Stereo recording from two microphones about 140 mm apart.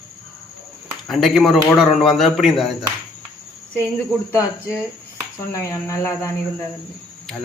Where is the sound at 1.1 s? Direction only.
Centre (ahead or behind).